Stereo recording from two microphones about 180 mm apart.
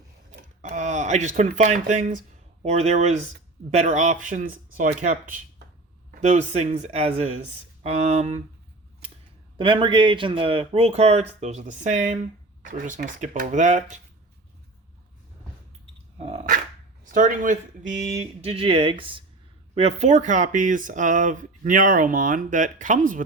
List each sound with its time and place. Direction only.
0.6 s speech: 40° right (ahead or behind)
9.6 s speech: 25° right (ahead or behind)
16.1 s dog: 35° right (ahead or behind)
17.1 s speech: 50° right (ahead or behind)
18.2 s speech: 35° right (ahead or behind)